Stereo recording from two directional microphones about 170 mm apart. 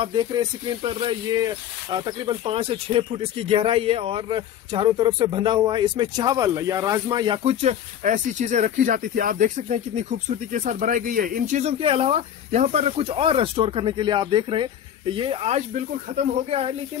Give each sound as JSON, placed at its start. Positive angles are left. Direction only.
{"t": 0.0, "sound": "speech", "side_deg": -30}
{"t": 7.4, "sound": "speech", "side_deg": -45}